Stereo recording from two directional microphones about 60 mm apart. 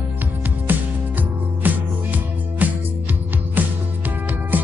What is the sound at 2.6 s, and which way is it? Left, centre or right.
Music, right.